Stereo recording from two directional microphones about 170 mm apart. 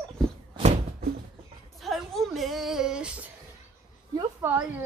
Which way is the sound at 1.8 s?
Centre (ahead or behind).